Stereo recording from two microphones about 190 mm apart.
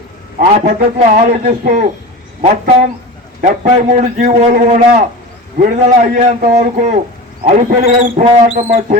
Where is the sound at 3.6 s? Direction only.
35° right (ahead or behind).